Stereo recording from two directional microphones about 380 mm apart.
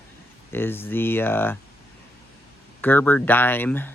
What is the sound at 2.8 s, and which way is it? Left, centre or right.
Speech, centre.